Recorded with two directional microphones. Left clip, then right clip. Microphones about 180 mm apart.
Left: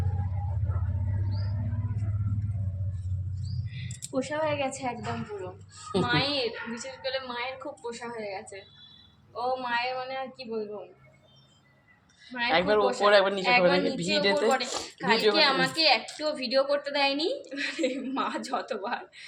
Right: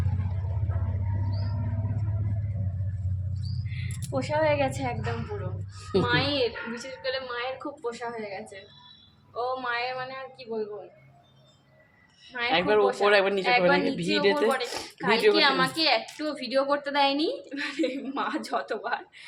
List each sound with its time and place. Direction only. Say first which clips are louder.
4.1 s a woman's voice: right 4 dB; 40° right (ahead or behind); by 4.9 s 25° right (ahead or behind)
5.9 s a woman's voice: right 2 dB; 15° right (ahead or behind)
12.5 s a woman's voice: right 1 dB; 5° right (ahead or behind)
14.0 s a woman's voice: right 1 dB; 5° right (ahead or behind)